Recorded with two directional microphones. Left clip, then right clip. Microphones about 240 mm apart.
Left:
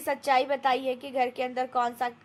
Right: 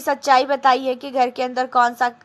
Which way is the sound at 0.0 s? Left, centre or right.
Centre.